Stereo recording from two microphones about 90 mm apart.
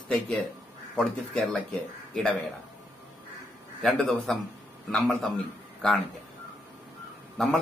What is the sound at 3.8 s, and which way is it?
Speech, centre (ahead or behind).